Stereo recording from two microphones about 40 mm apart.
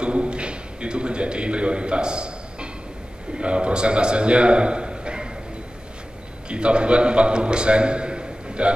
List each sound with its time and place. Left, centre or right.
0.0 s a sound: right
3.3 s a man's voice: right
6.5 s a man's voice: right